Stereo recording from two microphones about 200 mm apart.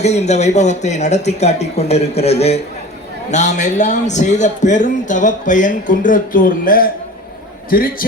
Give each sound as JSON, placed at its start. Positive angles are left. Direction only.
{"t": 0.0, "sound": "a man's voice", "side_deg": 35}